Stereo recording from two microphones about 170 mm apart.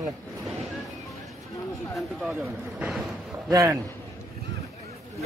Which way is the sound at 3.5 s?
20° right (ahead or behind).